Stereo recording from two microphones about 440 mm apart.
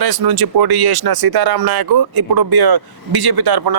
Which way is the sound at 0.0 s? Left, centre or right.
Right.